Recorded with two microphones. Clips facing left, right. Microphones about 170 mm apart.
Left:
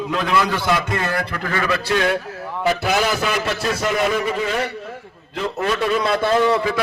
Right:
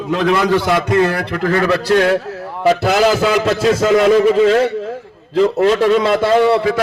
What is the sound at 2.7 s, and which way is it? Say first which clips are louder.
A man's voice: right 7 dB; 90° right.